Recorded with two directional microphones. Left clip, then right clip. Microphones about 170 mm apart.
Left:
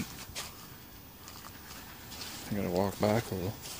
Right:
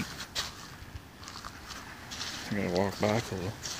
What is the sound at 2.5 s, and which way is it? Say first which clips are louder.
Speech: right 1 dB; 5° left (ahead or behind).